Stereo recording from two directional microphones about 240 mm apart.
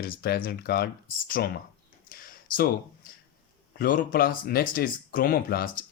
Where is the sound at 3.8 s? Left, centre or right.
Left.